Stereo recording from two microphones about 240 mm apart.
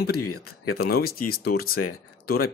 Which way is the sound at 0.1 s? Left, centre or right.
Left.